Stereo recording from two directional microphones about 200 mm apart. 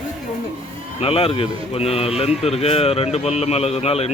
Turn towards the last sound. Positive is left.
turn(degrees=30)  # may be behind; listen again after turning